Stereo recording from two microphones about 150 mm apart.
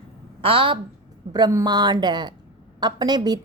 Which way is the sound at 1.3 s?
25° right (ahead or behind).